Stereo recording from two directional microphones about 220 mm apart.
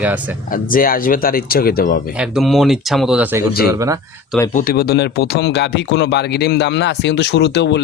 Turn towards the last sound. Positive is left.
turn(degrees=50)  # may be behind; listen again after turning